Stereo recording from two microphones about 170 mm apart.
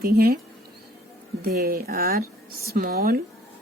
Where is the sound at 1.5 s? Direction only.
60° right (ahead or behind).